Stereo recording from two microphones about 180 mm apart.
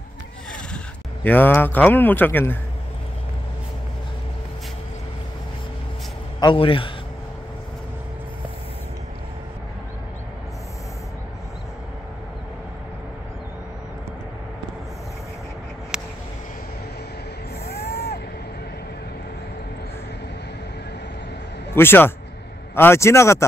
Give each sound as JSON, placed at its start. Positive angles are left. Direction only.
{"t": 1.2, "sound": "a man's voice", "side_deg": 10}
{"t": 6.4, "sound": "a man's voice", "side_deg": 30}
{"t": 15.9, "sound": "a sound", "side_deg": -5}
{"t": 17.6, "sound": "vehicle", "side_deg": 60}
{"t": 21.7, "sound": "a man's voice", "side_deg": 10}